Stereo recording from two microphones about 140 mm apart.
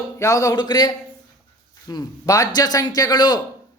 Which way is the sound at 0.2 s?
20° left (ahead or behind).